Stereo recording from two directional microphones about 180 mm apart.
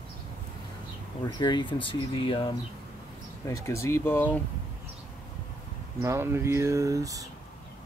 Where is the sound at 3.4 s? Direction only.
15° left (ahead or behind).